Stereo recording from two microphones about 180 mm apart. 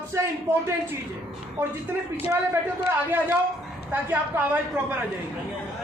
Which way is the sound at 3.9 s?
10° right (ahead or behind).